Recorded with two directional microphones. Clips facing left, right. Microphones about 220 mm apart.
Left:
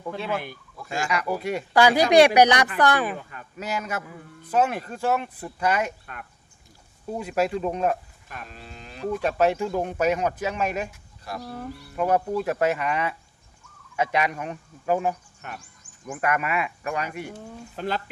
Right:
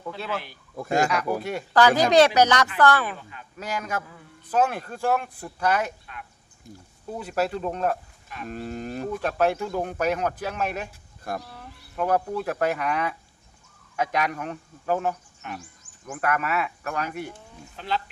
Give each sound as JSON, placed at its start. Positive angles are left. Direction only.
{"t": 0.2, "sound": "speech", "side_deg": 10}
{"t": 0.8, "sound": "cattle", "side_deg": -45}
{"t": 1.2, "sound": "speech", "side_deg": 10}
{"t": 7.2, "sound": "speech", "side_deg": 10}
{"t": 8.4, "sound": "cattle", "side_deg": -50}
{"t": 9.2, "sound": "speech", "side_deg": 5}
{"t": 11.4, "sound": "speech", "side_deg": 45}
{"t": 11.9, "sound": "speech", "side_deg": 5}
{"t": 17.7, "sound": "speech", "side_deg": 45}